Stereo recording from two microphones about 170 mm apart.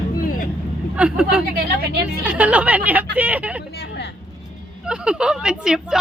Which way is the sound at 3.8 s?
80° left.